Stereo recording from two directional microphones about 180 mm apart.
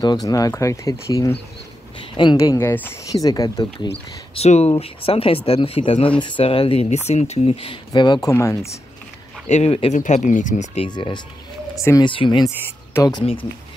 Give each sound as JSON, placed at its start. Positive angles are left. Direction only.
{"t": 0.0, "sound": "speech", "side_deg": 20}
{"t": 4.4, "sound": "speech", "side_deg": 35}
{"t": 9.5, "sound": "speech", "side_deg": 35}
{"t": 10.9, "sound": "speech", "side_deg": 25}
{"t": 13.2, "sound": "speech", "side_deg": 30}